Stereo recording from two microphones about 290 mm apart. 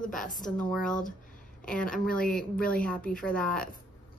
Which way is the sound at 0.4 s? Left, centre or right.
Centre.